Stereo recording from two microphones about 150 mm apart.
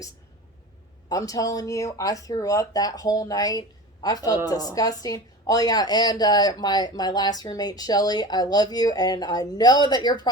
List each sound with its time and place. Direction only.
1.1 s a woman's voice: 25° left (ahead or behind)